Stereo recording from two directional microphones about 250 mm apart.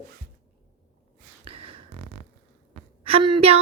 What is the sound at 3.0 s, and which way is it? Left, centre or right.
Speech, right.